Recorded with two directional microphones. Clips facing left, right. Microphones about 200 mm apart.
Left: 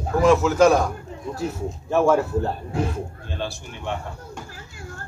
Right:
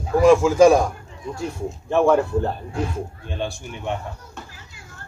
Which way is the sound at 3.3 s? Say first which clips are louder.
Right 3 dB; 15° right (ahead or behind).